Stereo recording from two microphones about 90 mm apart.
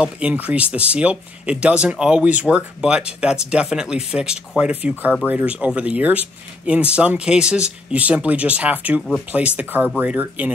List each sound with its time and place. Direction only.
0.0 s speech: 15° right (ahead or behind)